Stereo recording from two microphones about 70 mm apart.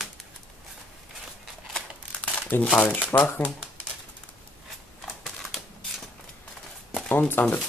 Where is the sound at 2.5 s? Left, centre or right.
Left.